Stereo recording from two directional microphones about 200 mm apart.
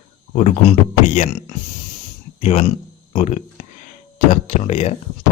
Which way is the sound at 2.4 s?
35° left (ahead or behind).